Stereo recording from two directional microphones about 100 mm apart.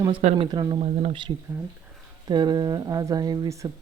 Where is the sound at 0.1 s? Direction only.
55° right (ahead or behind).